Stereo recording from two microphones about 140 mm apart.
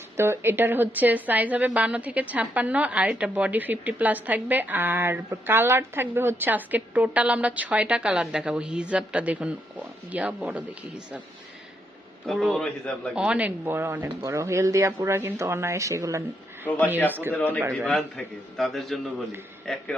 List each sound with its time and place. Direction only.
0.2 s a woman's voice: 15° right (ahead or behind)
12.2 s a man's voice: centre (ahead or behind)
17.3 s a man's voice: 10° left (ahead or behind)
17.6 s a woman's voice: 20° right (ahead or behind)
17.8 s a man's voice: 5° left (ahead or behind)